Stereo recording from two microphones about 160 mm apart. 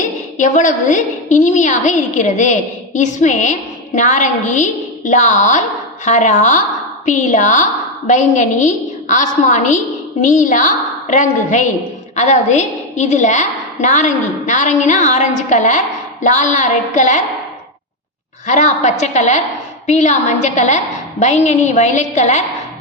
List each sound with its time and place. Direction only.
0.0 s a woman's voice: 50° left (ahead or behind)
18.4 s a woman's voice: 50° left (ahead or behind)